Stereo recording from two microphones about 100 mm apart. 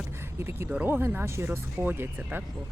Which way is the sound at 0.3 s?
25° right (ahead or behind).